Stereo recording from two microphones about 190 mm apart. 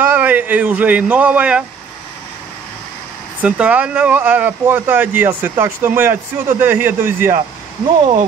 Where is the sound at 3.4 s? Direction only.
5° right (ahead or behind).